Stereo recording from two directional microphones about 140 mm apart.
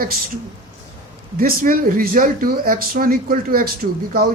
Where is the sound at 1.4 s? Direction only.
90° right.